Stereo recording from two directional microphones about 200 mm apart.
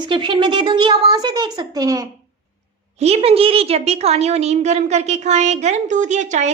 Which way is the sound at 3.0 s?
30° right (ahead or behind).